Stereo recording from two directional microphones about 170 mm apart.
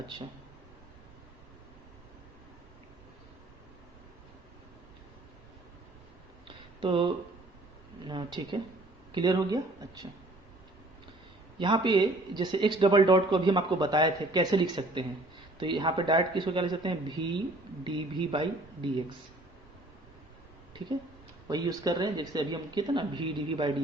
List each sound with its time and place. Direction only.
6.7 s speech: 30° right (ahead or behind)
11.6 s speech: 30° right (ahead or behind)
21.4 s speech: 25° right (ahead or behind)